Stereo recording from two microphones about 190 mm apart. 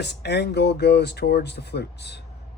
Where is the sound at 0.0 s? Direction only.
60° left (ahead or behind).